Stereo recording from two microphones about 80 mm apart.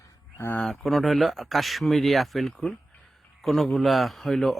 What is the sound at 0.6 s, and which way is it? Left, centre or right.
Speech, centre.